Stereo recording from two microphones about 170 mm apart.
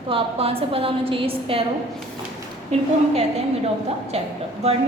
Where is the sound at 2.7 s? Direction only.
40° right (ahead or behind).